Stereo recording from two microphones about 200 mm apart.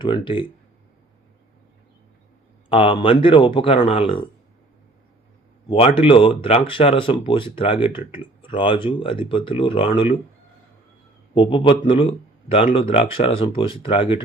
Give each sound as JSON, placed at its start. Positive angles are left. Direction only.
{"t": 0.0, "sound": "speech", "side_deg": 25}
{"t": 2.6, "sound": "speech", "side_deg": 25}
{"t": 5.6, "sound": "speech", "side_deg": 25}
{"t": 11.3, "sound": "speech", "side_deg": 25}